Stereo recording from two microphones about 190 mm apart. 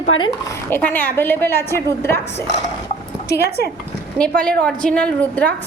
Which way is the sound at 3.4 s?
55° right (ahead or behind).